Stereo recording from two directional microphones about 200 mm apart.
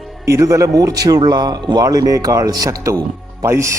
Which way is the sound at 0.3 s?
15° right (ahead or behind).